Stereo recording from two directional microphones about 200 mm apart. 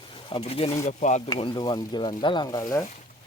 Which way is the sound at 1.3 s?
25° left (ahead or behind).